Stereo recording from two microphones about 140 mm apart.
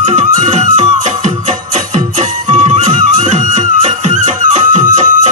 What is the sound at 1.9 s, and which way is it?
Music, 60° right (ahead or behind).